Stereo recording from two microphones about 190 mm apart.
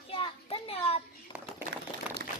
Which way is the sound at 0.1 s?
30° left (ahead or behind).